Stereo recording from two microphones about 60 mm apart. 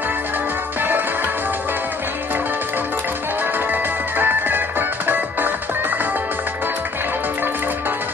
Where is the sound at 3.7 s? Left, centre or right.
Right.